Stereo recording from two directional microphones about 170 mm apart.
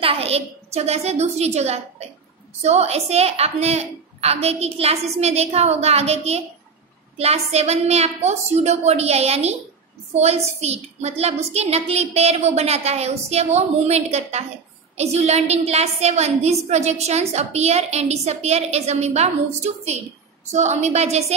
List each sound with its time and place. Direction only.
0.0 s a woman's voice: 35° right (ahead or behind)